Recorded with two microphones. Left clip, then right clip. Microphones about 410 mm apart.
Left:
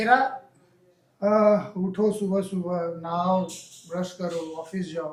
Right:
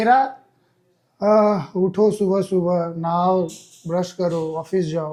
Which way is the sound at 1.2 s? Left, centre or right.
Right.